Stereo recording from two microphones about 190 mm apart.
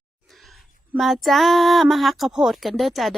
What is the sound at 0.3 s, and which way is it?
Female singing, centre (ahead or behind).